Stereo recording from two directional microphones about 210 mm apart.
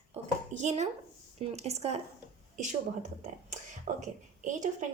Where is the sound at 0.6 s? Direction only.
35° right (ahead or behind).